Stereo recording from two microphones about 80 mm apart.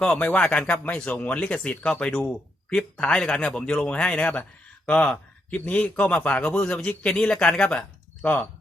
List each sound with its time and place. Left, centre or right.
0.0 s speech: centre